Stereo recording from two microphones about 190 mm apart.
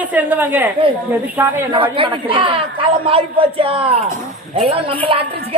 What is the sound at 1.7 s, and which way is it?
A man's voice, 25° right (ahead or behind).